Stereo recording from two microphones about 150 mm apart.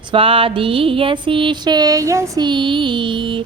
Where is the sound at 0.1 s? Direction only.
35° right (ahead or behind).